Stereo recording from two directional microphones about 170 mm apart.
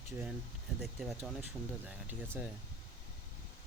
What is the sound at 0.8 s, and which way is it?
Speech, centre (ahead or behind).